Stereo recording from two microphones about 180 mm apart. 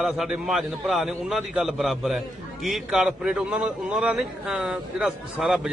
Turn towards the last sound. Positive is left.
turn(degrees=-5)  # may be behind; listen again after turning